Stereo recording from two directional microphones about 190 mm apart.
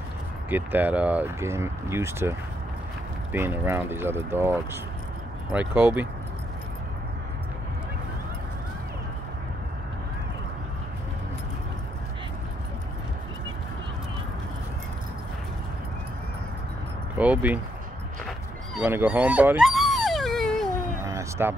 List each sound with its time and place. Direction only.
0.5 s speech: 10° right (ahead or behind)
3.3 s speech: 10° right (ahead or behind)
17.2 s speech: 5° right (ahead or behind)
18.8 s dog: 10° right (ahead or behind)
21.0 s a sound: 15° right (ahead or behind)